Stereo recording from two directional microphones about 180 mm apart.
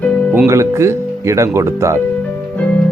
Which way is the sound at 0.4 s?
15° right (ahead or behind).